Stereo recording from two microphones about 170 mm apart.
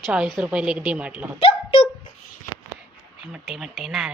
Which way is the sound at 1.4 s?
30° left (ahead or behind).